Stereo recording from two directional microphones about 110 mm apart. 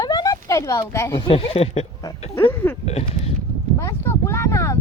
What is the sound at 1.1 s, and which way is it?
Speech, 60° left (ahead or behind).